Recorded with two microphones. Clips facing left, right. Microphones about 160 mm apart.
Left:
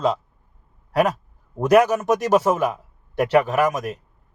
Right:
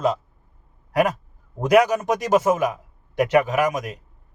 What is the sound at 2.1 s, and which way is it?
Speech, 15° right (ahead or behind).